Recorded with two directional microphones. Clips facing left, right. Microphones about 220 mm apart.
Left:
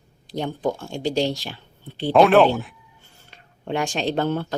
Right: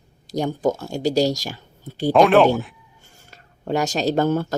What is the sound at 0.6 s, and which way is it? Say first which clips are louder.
Speech: right 3 dB; 40° right (ahead or behind).